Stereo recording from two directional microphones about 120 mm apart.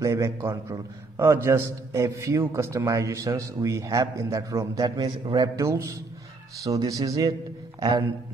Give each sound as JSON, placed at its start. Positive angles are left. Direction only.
{"t": 0.0, "sound": "a man's voice", "side_deg": -25}
{"t": 5.6, "sound": "a man's voice", "side_deg": -25}